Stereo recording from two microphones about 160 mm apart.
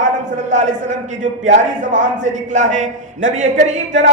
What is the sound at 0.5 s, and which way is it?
Speech, 50° right (ahead or behind).